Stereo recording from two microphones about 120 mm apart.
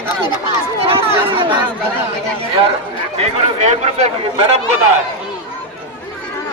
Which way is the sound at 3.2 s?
75° right (ahead or behind).